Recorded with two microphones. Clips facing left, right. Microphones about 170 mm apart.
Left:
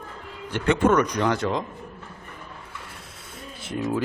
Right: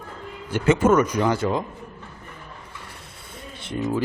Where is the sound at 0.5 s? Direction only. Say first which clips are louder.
Right 2 dB; 5° right (ahead or behind).